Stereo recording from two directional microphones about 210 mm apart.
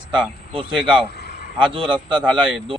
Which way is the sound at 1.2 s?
50° left (ahead or behind).